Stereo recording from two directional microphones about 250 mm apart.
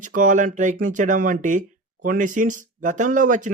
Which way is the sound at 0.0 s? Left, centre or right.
Right.